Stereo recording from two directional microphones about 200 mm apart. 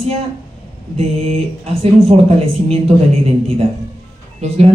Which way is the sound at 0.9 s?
30° right (ahead or behind).